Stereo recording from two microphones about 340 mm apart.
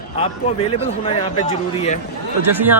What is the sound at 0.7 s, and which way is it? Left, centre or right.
A man's voice, centre.